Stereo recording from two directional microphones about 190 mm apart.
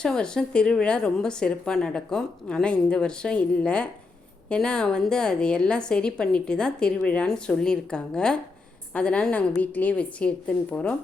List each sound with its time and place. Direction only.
0.0 s a woman's voice: 5° left (ahead or behind)